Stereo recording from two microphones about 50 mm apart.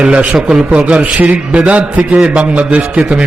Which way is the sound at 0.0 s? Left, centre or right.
Centre.